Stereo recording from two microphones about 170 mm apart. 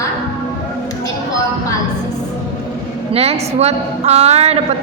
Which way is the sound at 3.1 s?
35° right (ahead or behind).